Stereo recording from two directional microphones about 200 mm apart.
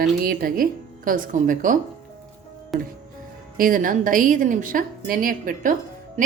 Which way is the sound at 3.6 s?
45° right (ahead or behind).